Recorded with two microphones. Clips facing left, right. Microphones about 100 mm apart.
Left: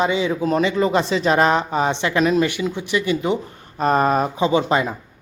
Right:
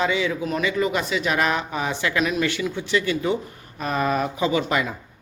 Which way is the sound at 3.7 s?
40° left (ahead or behind).